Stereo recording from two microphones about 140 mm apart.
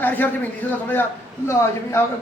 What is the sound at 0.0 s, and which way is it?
A man's voice, 15° left (ahead or behind).